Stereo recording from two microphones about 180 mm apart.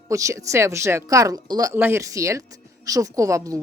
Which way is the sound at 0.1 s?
15° right (ahead or behind).